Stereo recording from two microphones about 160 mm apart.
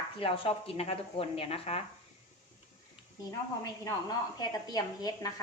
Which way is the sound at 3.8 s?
25° left (ahead or behind).